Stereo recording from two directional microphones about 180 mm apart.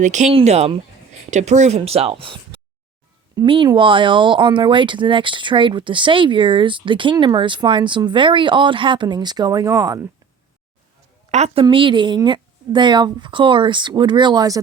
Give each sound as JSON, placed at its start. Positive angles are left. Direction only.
{"t": 0.0, "sound": "speech", "side_deg": -40}
{"t": 11.3, "sound": "a woman's voice", "side_deg": -35}